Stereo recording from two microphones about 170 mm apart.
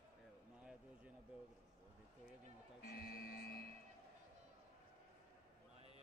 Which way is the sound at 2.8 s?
60° left (ahead or behind).